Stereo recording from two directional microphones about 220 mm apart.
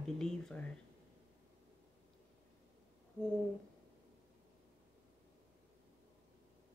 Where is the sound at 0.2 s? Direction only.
Centre (ahead or behind).